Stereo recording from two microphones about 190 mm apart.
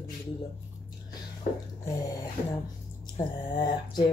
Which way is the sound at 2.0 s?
20° left (ahead or behind).